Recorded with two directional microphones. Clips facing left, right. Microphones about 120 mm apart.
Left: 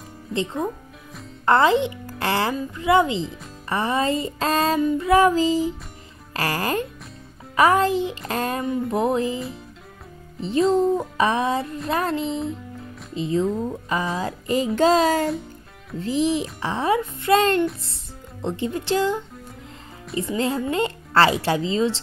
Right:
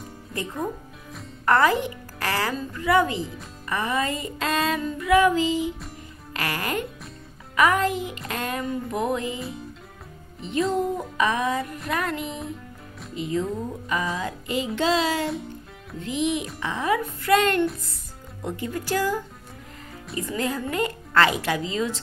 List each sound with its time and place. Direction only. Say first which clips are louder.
0.3 s a child's voice: left 4 dB; 25° left (ahead or behind)
3.6 s music: left 3 dB; 30° left (ahead or behind)
10.4 s a child's voice: left 5 dB; 30° left (ahead or behind)
13.1 s music: left 4 dB; 30° left (ahead or behind)
16.0 s music: left 4 dB; 35° left (ahead or behind)
18.4 s a child's voice: left 4 dB; 25° left (ahead or behind)